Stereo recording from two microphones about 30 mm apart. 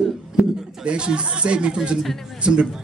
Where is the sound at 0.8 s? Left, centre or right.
Right.